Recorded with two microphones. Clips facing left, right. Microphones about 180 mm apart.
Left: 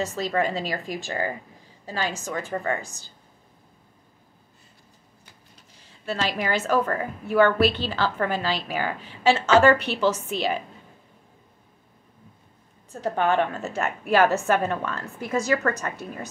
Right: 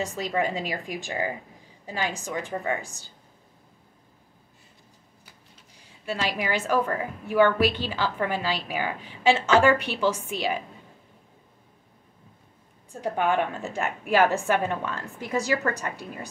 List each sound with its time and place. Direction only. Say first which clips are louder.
0.0 s a woman's voice: left 2 dB; 10° right (ahead or behind)
5.8 s a woman's voice: left 2 dB; 10° right (ahead or behind)
12.9 s a woman's voice: left 2 dB; 10° right (ahead or behind)